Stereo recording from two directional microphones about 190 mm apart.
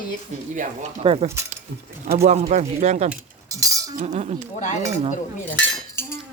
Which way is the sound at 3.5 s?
20° right (ahead or behind).